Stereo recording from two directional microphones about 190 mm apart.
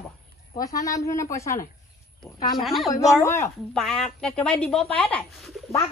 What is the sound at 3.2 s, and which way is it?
Speech, 15° left (ahead or behind).